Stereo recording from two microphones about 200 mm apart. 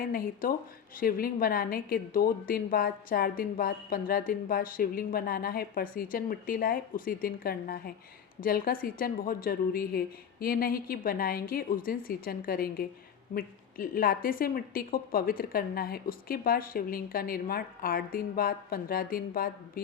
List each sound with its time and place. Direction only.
0.0 s a woman's voice: 45° left (ahead or behind)